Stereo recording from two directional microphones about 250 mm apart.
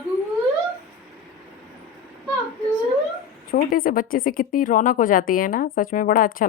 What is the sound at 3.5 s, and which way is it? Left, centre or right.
A woman's voice, left.